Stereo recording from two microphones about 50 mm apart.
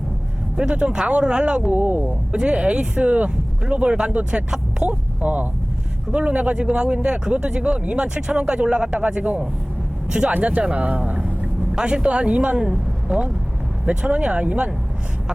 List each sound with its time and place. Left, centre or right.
0.5 s speech: centre
1.7 s speech: right
2.3 s speech: right